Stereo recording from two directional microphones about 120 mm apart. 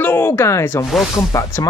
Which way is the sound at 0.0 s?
20° left (ahead or behind).